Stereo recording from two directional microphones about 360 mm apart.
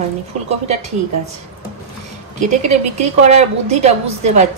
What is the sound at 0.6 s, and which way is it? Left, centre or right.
Speech, centre.